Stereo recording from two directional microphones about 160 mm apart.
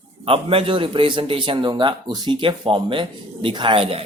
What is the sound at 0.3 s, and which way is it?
Speech, 35° right (ahead or behind).